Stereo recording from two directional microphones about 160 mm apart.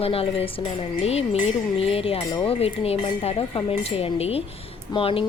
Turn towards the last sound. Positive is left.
turn(degrees=35)  # may be behind; listen again after turning